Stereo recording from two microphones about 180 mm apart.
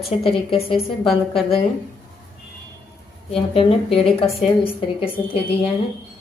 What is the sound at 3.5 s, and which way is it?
A woman's voice, 30° left (ahead or behind).